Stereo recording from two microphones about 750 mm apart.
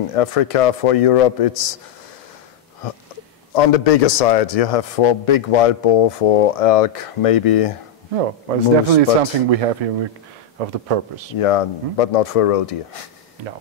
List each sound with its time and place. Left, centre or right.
0.1 s a man's voice: left
3.5 s a man's voice: left
8.1 s speech: right
11.3 s a man's voice: left